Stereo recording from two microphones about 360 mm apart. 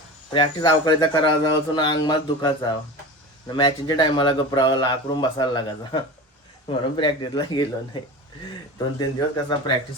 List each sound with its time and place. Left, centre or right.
0.3 s speech: centre
9.0 s speech: centre